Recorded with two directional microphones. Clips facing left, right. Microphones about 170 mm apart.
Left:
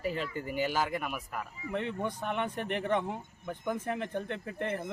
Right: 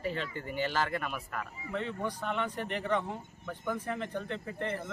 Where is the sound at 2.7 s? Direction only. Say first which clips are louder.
Left 2 dB; 55° left (ahead or behind).